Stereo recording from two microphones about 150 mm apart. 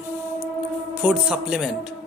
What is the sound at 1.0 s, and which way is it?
Speech, 10° right (ahead or behind).